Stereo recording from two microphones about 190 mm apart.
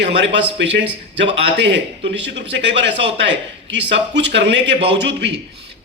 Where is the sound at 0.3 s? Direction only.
70° right (ahead or behind).